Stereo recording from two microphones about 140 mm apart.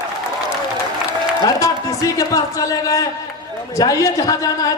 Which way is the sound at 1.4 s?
25° left (ahead or behind).